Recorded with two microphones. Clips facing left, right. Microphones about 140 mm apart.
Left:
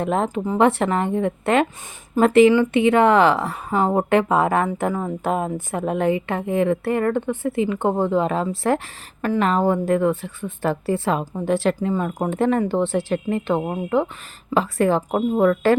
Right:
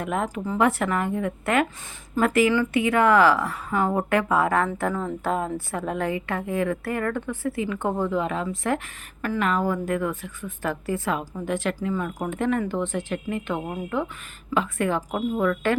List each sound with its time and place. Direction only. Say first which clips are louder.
0.0 s a woman's voice: left 5 dB; 30° left (ahead or behind)